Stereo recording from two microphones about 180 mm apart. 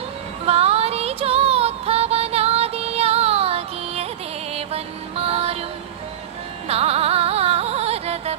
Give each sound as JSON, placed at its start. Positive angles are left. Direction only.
{"t": 0.4, "sound": "music", "side_deg": -35}
{"t": 6.7, "sound": "carnatic music", "side_deg": -35}